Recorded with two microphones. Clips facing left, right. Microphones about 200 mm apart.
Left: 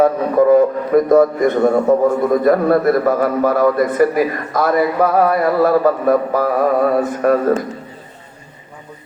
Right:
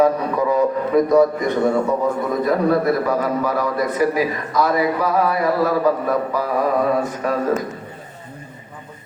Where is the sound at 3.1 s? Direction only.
50° left (ahead or behind).